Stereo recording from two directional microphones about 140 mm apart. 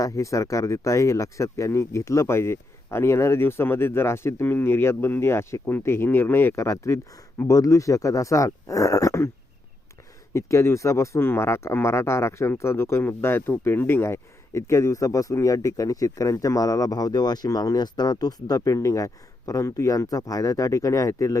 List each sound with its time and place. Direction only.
0.0 s speech: 25° left (ahead or behind)
10.3 s speech: 20° left (ahead or behind)